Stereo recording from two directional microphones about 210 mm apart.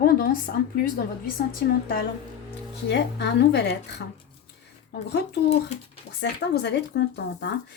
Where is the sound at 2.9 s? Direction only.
55° left (ahead or behind).